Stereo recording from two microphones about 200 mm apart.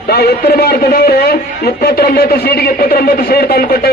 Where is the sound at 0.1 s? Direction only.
55° left (ahead or behind).